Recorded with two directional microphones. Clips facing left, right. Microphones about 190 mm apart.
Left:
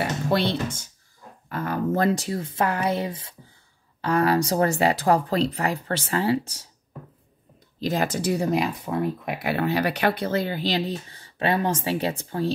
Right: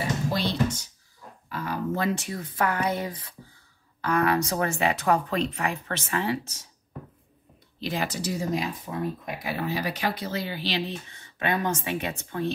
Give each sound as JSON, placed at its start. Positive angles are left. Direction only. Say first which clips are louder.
{"t": 0.0, "sound": "a sound", "louder": "left 4 dB", "side_deg": 65}
{"t": 2.1, "sound": "a woman's voice", "louder": "left 4 dB", "side_deg": 30}
{"t": 7.8, "sound": "speech", "louder": "left 5 dB", "side_deg": 45}